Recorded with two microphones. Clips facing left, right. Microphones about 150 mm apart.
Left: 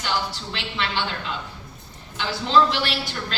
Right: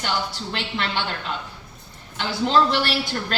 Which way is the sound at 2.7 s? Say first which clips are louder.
Right 3 dB; 55° right (ahead or behind).